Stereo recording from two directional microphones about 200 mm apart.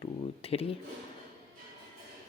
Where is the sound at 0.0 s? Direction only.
30° left (ahead or behind).